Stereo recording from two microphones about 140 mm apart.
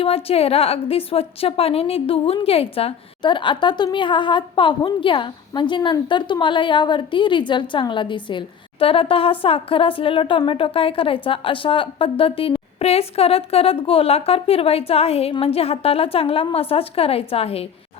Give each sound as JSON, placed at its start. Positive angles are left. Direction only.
{"t": 0.0, "sound": "a woman's voice", "side_deg": 45}